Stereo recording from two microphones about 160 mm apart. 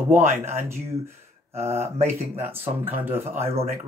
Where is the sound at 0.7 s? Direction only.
15° right (ahead or behind).